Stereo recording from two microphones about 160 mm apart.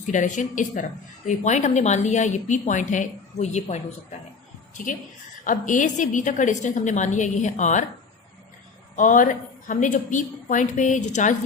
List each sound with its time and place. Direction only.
0.0 s a woman's voice: 50° left (ahead or behind)
5.5 s a woman's voice: 50° left (ahead or behind)
9.0 s a woman's voice: 55° left (ahead or behind)